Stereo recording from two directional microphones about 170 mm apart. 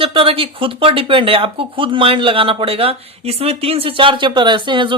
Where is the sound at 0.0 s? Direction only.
30° right (ahead or behind).